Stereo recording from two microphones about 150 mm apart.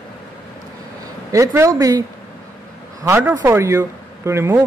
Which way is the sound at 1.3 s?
20° right (ahead or behind).